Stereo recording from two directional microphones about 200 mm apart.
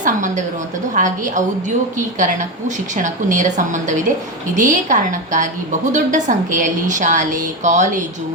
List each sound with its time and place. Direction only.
0.0 s music: 40° right (ahead or behind)
0.9 s a woman's voice: 40° right (ahead or behind)